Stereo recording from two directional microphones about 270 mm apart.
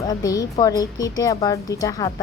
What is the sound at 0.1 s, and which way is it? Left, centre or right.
A woman's voice, centre.